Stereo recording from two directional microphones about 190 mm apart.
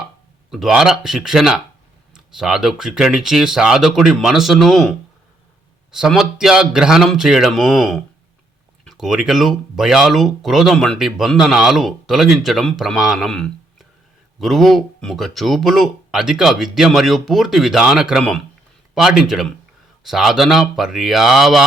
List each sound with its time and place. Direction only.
0.5 s speech: centre (ahead or behind)